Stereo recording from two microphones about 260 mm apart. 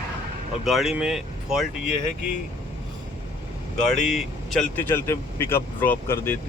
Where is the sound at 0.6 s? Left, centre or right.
Centre.